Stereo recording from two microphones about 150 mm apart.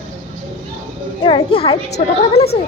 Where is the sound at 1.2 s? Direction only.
35° left (ahead or behind).